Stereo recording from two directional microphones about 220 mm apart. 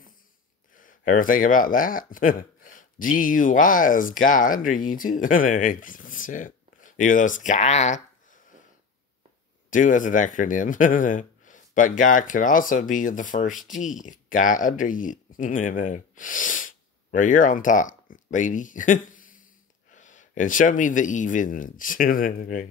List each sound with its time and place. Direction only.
0.7 s speech: 40° left (ahead or behind)
9.7 s speech: 35° left (ahead or behind)